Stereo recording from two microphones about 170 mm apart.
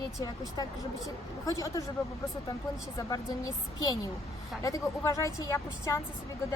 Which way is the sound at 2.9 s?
20° left (ahead or behind).